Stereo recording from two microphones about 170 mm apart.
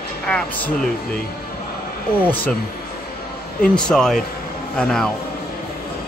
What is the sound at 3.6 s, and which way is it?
Speech, 5° left (ahead or behind).